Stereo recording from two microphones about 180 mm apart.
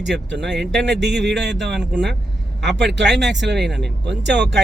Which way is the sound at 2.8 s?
70° right (ahead or behind).